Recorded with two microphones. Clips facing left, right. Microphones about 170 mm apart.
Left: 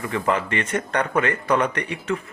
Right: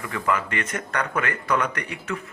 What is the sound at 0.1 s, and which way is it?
Speech, 30° left (ahead or behind).